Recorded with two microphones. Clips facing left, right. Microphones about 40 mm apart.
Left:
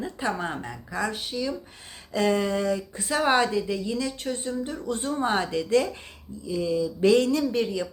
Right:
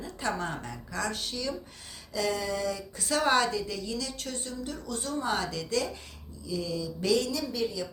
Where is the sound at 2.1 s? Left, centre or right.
Left.